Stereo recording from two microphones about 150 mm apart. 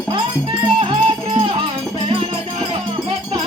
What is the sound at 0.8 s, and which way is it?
Music, 35° right (ahead or behind).